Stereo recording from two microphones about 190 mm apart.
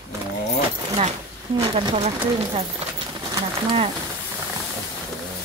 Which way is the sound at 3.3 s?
25° right (ahead or behind).